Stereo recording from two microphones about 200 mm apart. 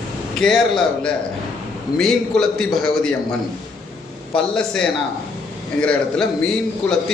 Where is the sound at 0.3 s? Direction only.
Centre (ahead or behind).